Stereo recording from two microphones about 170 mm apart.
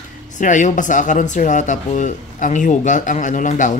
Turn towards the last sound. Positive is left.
turn(degrees=50)  # may be behind; listen again after turning